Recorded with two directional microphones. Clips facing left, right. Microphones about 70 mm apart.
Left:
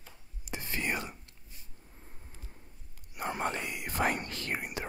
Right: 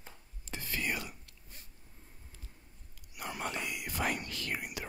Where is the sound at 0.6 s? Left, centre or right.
Left.